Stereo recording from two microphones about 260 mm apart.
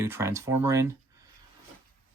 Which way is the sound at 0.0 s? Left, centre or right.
Centre.